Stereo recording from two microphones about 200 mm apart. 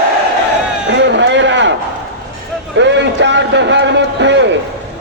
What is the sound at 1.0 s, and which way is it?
Run, 60° right (ahead or behind).